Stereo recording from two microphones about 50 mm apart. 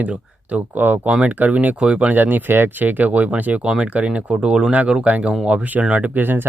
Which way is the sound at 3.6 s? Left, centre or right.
Centre.